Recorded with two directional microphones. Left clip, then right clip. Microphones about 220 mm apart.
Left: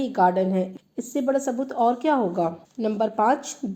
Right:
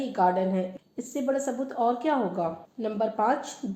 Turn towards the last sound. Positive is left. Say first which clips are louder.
# left 4 dB
turn(degrees=40)  # may be behind; listen again after turning